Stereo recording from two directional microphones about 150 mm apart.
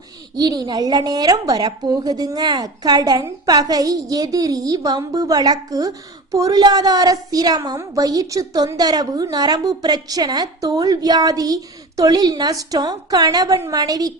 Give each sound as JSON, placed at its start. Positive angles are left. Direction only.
{"t": 0.3, "sound": "a woman's voice", "side_deg": -25}